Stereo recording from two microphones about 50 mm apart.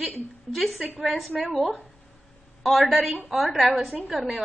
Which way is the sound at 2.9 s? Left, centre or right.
Centre.